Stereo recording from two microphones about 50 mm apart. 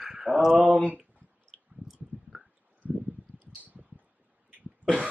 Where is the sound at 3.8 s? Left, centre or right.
Centre.